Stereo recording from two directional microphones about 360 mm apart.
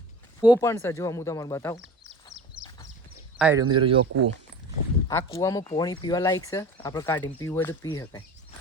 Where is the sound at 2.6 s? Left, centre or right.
Centre.